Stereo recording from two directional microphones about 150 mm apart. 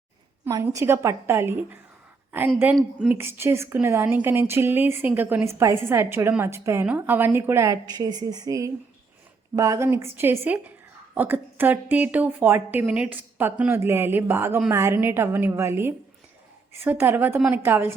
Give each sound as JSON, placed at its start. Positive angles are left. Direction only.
{"t": 0.4, "sound": "speech", "side_deg": -20}
{"t": 3.1, "sound": "a woman's voice", "side_deg": -15}